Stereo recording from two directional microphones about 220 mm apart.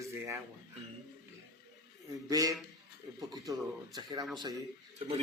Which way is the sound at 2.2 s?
15° right (ahead or behind).